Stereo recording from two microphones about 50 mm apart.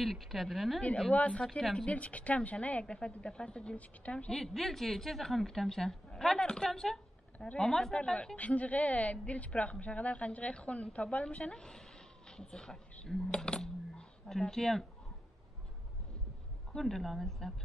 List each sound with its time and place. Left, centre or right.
0.0 s a woman's voice: centre
1.1 s a woman's voice: left
1.4 s a woman's voice: centre
1.9 s a woman's voice: left
4.3 s a woman's voice: centre
16.7 s a woman's voice: centre